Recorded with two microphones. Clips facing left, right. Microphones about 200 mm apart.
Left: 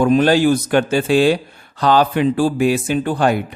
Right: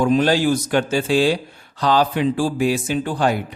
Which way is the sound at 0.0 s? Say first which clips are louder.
Left 3 dB; 60° left (ahead or behind).